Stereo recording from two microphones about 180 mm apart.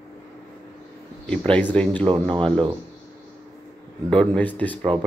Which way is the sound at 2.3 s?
30° right (ahead or behind).